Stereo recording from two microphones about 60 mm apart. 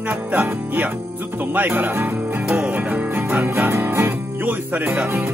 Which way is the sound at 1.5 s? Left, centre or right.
Right.